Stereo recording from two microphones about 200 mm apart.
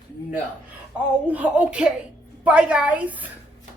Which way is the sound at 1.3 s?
5° right (ahead or behind).